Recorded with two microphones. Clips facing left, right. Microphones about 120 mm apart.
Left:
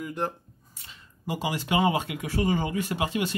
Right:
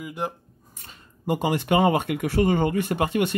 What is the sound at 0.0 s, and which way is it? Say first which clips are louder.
Speech: even; 10° right (ahead or behind).